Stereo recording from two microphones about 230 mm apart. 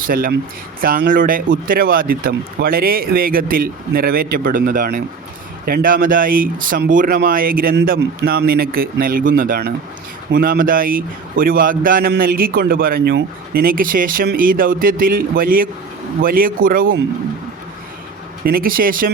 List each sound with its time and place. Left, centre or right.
0.1 s a man's voice: right
18.4 s a man's voice: right